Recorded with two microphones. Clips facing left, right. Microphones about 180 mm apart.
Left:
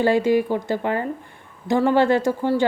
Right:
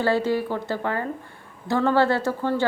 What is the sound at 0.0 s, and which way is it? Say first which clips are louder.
Speech: left 4 dB; 15° left (ahead or behind).